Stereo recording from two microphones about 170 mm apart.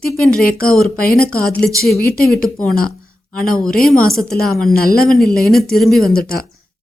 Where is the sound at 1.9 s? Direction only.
60° left (ahead or behind).